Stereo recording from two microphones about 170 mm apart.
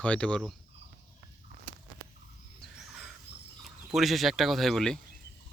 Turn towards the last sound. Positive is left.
turn(degrees=0)  # may be behind; listen again after turning